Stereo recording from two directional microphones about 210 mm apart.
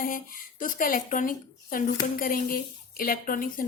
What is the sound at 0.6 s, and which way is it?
A woman's voice, 40° left (ahead or behind).